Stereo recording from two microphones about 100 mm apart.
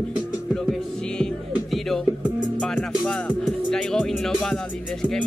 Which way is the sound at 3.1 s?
15° left (ahead or behind).